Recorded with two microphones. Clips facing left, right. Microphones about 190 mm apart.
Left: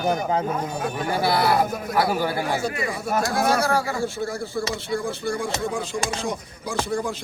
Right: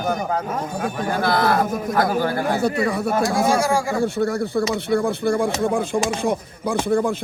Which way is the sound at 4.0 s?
60° right (ahead or behind).